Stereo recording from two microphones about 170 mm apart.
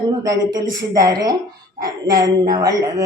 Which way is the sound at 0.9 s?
20° right (ahead or behind).